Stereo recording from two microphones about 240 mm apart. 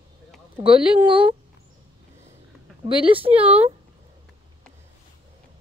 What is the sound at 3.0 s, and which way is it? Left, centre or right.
Speech, right.